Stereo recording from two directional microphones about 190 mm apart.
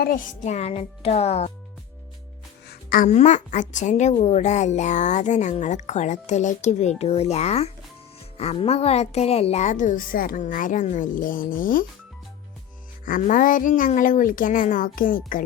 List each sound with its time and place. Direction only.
0.0 s speech: 45° left (ahead or behind)
2.6 s music: 50° left (ahead or behind)
3.1 s speech: 35° left (ahead or behind)
13.1 s a woman's voice: 45° left (ahead or behind)